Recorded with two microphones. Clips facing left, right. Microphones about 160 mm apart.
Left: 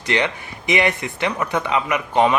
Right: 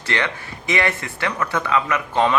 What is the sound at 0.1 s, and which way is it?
Speech, 20° left (ahead or behind).